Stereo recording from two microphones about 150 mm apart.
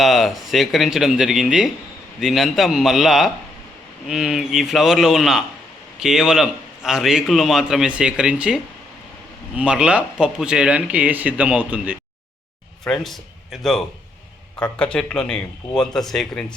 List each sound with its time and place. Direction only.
0.0 s a man's voice: centre (ahead or behind)
12.8 s a man's voice: 5° left (ahead or behind)